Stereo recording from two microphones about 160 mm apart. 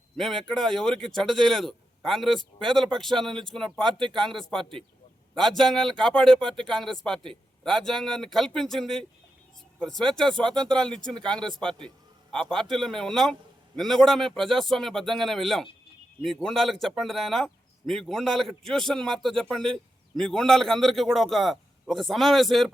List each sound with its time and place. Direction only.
0.2 s speech: centre (ahead or behind)
10.9 s speech: 30° right (ahead or behind)
11.3 s speech: 5° left (ahead or behind)